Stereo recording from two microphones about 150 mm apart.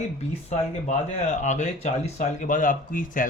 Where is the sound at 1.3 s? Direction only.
50° left (ahead or behind).